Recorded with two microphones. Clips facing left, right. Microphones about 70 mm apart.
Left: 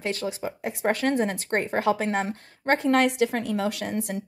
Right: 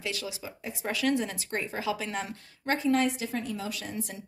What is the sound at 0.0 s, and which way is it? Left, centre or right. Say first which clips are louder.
A woman's voice: left 7 dB; left.